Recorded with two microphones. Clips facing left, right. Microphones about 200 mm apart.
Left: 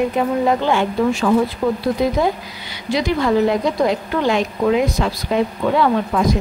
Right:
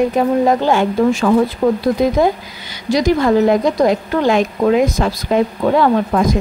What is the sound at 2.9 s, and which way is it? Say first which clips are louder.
A woman's voice: right 4 dB; 45° right (ahead or behind).